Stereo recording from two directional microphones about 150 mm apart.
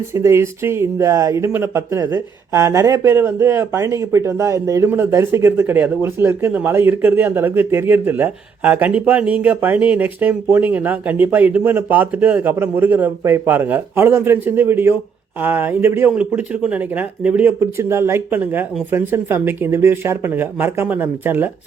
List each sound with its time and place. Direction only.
0.1 s speech: 20° right (ahead or behind)